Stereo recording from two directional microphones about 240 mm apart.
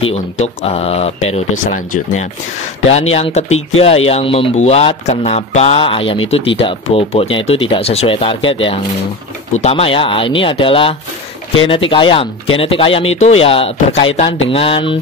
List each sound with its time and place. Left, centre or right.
0.1 s speech: left
3.1 s speech: left